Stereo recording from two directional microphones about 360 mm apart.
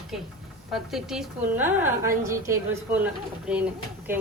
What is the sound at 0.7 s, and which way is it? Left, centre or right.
A woman's voice, centre.